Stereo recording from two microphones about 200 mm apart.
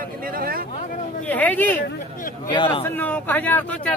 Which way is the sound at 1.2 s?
10° left (ahead or behind).